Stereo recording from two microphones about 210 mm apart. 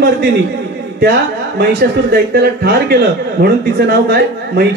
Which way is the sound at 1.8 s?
50° right (ahead or behind).